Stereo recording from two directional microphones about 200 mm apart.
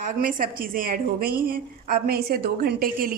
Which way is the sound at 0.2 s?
45° right (ahead or behind).